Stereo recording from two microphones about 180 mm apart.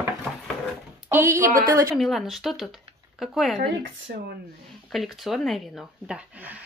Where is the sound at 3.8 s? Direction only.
80° right.